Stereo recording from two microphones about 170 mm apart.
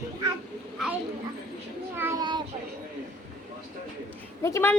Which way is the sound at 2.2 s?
25° right (ahead or behind).